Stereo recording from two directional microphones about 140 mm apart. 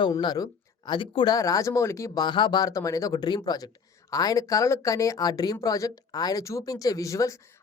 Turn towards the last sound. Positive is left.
turn(degrees=20)  # may be behind; listen again after turning